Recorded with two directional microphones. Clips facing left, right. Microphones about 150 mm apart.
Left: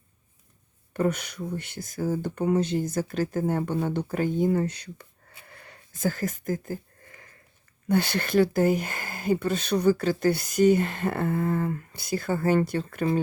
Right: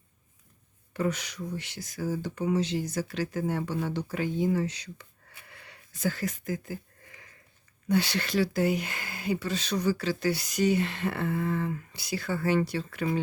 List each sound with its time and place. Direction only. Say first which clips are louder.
0.9 s speech: left 4 dB; 55° left (ahead or behind)
5.5 s a sound: left 3 dB; 45° left (ahead or behind)
7.9 s speech: left 2 dB; 50° left (ahead or behind)